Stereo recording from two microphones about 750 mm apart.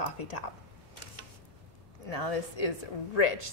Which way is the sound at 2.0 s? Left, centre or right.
Left.